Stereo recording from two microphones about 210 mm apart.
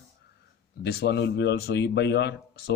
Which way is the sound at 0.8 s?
50° left (ahead or behind).